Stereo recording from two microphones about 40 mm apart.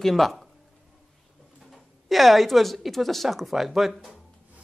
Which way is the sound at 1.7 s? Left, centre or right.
Centre.